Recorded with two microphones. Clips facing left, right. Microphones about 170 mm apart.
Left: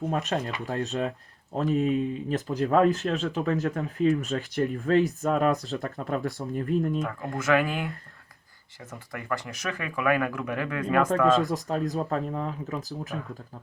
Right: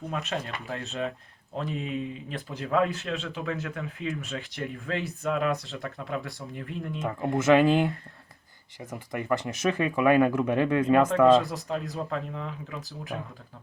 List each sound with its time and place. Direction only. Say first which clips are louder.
0.0 s speech: left 4 dB; 40° left (ahead or behind)
7.0 s speech: right 4 dB; 20° right (ahead or behind)
11.5 s speech: left 4 dB; 40° left (ahead or behind)